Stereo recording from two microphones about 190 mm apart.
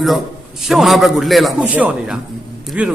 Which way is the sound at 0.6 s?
Centre (ahead or behind).